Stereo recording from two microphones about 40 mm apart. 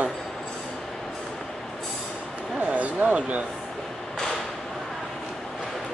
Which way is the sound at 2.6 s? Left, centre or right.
Right.